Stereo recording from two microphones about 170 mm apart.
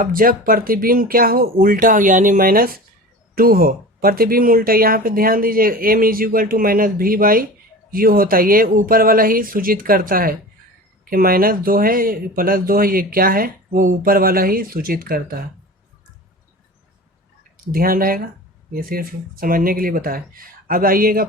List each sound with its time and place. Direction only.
0.0 s speech: 55° right (ahead or behind)
17.7 s speech: 60° right (ahead or behind)